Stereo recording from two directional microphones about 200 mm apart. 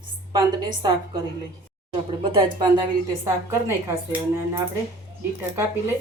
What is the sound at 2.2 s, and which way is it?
A woman's voice, 25° right (ahead or behind).